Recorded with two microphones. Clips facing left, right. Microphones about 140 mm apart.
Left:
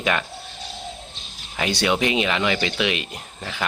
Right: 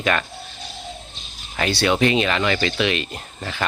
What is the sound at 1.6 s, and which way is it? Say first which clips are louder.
Speech: right 3 dB; 15° left (ahead or behind).